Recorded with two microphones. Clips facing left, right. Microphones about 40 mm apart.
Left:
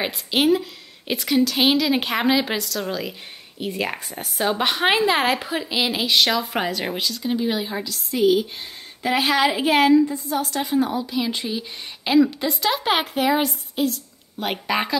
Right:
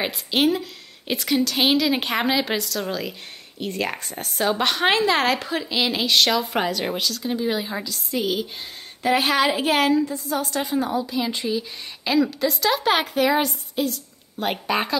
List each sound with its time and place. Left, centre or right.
0.0 s a woman's voice: centre
11.4 s a woman's voice: centre